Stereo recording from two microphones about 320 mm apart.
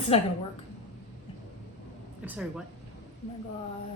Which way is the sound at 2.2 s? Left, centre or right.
Centre.